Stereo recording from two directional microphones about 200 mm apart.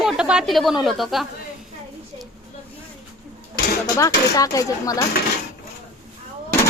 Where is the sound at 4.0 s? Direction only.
15° left (ahead or behind).